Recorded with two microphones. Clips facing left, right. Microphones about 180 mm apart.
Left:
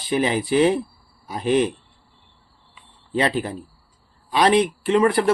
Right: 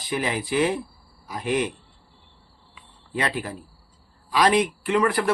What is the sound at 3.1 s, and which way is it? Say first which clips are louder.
Speech: left 6 dB; 30° left (ahead or behind).